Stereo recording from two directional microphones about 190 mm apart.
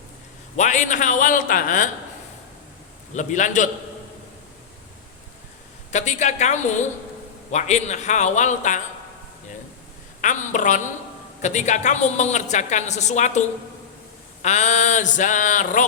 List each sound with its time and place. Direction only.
0.5 s a woman's voice: 40° left (ahead or behind)
3.2 s a woman's voice: 40° left (ahead or behind)
5.9 s a woman's voice: 40° left (ahead or behind)
10.2 s a woman's voice: 40° left (ahead or behind)
14.4 s a woman's voice: 35° left (ahead or behind)